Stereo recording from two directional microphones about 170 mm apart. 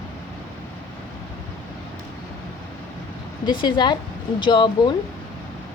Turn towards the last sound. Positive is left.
turn(degrees=30)  # may be behind; listen again after turning